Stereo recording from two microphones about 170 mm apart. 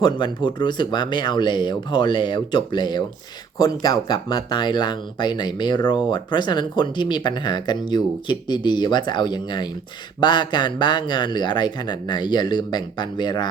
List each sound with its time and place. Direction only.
0.0 s speech: 25° left (ahead or behind)